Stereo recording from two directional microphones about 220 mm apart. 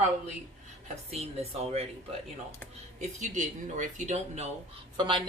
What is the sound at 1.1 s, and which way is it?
Speech, 30° right (ahead or behind).